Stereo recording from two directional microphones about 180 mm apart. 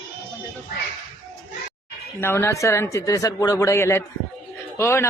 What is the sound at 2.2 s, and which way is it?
Speech, 15° left (ahead or behind).